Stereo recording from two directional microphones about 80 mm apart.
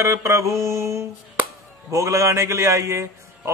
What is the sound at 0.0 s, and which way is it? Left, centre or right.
Speech, right.